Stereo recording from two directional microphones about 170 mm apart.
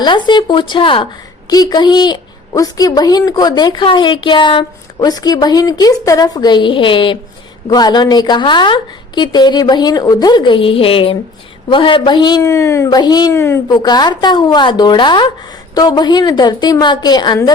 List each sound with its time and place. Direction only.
0.0 s a woman's voice: 25° left (ahead or behind)